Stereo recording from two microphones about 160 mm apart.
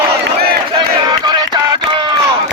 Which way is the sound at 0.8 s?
25° right (ahead or behind).